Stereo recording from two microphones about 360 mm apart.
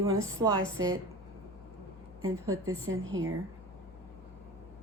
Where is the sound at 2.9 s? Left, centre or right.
Right.